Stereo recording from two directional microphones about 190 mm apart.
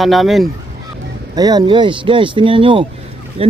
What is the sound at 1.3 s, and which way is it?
Speech, 20° right (ahead or behind).